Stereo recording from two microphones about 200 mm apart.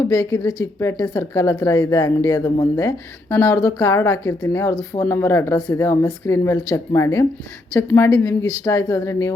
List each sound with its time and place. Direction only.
0.1 s a woman's voice: 15° left (ahead or behind)